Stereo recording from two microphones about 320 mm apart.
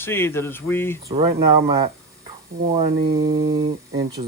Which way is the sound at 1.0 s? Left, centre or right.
Centre.